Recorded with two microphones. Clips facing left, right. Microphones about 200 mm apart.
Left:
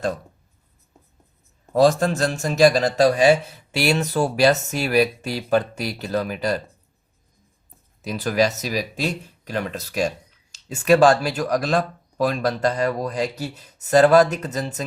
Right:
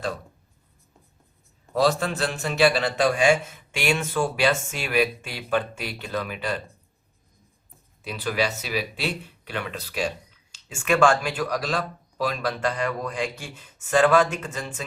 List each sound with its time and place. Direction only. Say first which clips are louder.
1.7 s a man's voice: left 5 dB; 45° left (ahead or behind)
8.0 s a man's voice: left 5 dB; 45° left (ahead or behind)